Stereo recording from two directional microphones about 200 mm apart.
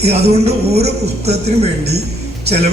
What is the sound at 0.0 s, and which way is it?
A man's voice, 30° right (ahead or behind).